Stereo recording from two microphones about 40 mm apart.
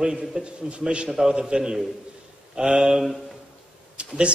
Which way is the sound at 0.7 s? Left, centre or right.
Right.